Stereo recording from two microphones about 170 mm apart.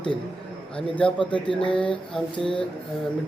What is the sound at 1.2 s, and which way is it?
Speech, 30° left (ahead or behind).